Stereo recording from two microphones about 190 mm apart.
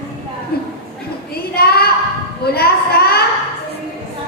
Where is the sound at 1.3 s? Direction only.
55° left (ahead or behind).